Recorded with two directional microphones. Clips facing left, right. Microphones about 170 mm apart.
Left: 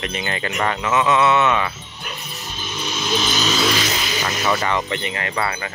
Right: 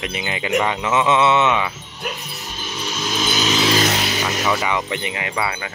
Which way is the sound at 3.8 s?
60° right (ahead or behind).